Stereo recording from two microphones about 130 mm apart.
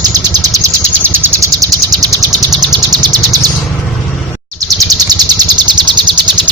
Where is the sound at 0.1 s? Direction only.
25° right (ahead or behind).